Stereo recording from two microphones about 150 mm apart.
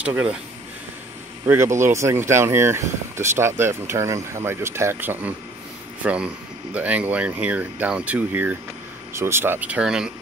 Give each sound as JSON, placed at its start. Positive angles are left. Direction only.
{"t": 0.0, "sound": "speech", "side_deg": -10}
{"t": 1.9, "sound": "speech", "side_deg": -20}